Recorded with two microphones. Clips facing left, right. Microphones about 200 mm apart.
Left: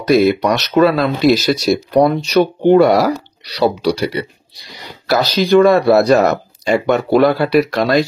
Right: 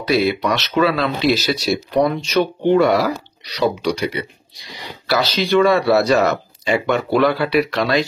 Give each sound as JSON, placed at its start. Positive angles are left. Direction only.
{"t": 0.0, "sound": "speech", "side_deg": 45}